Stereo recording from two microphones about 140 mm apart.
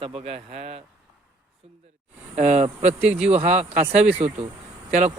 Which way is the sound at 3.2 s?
55° right (ahead or behind).